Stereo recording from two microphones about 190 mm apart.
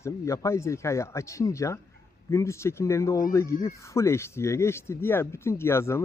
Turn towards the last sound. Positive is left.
turn(degrees=15)  # may be behind; listen again after turning